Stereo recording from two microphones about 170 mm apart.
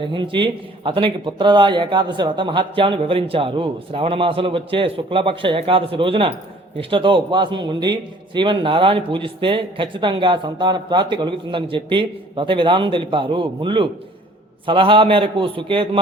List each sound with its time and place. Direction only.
0.0 s a man's voice: 30° right (ahead or behind)